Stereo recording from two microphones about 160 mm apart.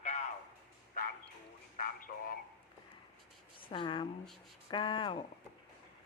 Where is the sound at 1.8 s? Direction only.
60° left (ahead or behind).